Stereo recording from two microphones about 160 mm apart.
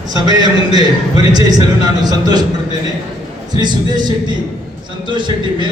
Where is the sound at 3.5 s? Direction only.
25° right (ahead or behind).